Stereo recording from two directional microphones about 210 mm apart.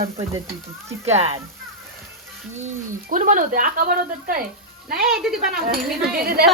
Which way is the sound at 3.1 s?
40° right (ahead or behind).